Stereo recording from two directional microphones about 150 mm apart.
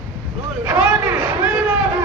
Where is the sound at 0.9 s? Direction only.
15° right (ahead or behind).